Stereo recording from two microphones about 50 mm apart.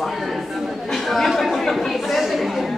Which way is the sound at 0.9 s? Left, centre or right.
Centre.